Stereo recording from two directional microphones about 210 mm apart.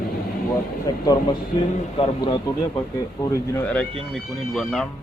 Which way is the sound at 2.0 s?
20° left (ahead or behind).